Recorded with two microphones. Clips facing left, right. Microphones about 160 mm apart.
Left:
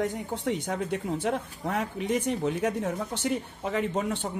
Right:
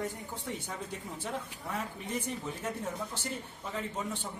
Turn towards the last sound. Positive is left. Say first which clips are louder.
# left 9 dB
turn(degrees=75)  # may be behind; listen again after turning